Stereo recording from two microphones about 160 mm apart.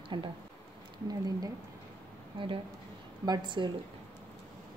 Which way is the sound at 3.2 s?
30° right (ahead or behind).